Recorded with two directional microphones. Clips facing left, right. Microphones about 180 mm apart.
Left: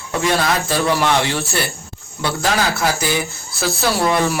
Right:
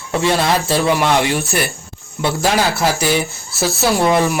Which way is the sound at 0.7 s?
15° right (ahead or behind).